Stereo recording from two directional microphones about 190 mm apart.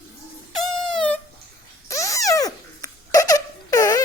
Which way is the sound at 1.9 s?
15° left (ahead or behind).